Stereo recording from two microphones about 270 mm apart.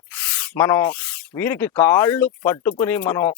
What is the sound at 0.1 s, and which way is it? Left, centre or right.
Speech, centre.